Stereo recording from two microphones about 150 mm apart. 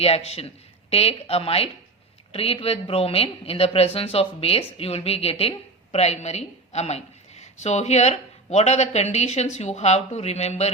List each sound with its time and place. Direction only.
0.0 s a woman's voice: 45° left (ahead or behind)